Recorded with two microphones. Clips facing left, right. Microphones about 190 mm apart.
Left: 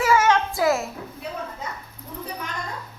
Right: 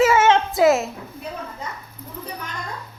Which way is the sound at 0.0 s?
25° right (ahead or behind).